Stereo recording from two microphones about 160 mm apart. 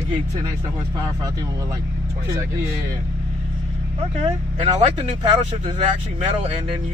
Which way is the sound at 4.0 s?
40° right (ahead or behind).